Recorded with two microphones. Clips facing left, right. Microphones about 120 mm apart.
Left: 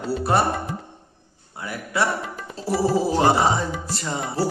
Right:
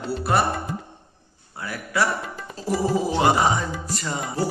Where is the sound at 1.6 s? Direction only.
20° left (ahead or behind).